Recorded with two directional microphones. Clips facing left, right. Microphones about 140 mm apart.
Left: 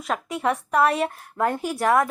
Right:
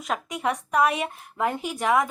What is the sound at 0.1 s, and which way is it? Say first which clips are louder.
A woman's voice: left 3 dB; 5° right (ahead or behind).